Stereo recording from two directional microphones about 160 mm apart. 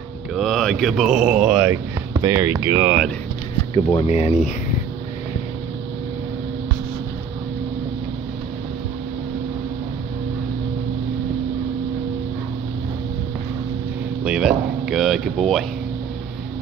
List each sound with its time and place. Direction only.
0.3 s speech: centre (ahead or behind)
2.2 s speech: 20° right (ahead or behind)
3.7 s speech: 40° left (ahead or behind)
14.2 s a sound: 5° right (ahead or behind)